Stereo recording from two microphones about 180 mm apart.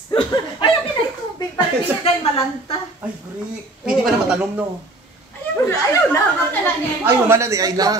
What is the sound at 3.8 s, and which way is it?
Speech, 5° right (ahead or behind).